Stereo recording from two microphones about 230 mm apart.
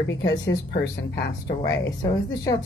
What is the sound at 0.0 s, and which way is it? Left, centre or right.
A woman's voice, left.